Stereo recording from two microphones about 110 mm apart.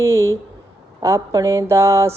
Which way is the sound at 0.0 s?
25° right (ahead or behind).